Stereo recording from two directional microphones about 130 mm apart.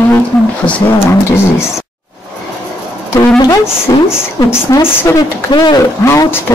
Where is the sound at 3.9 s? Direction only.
30° left (ahead or behind).